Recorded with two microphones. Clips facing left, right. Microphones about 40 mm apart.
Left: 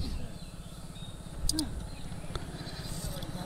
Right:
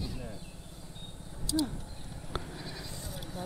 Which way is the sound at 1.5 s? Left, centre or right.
Right.